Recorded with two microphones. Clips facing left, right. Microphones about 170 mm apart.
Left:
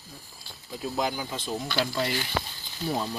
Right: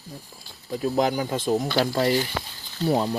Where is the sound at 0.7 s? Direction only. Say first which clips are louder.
Right 7 dB; 50° right (ahead or behind).